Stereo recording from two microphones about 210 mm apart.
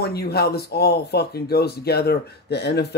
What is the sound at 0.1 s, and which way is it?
Speech, 50° left (ahead or behind).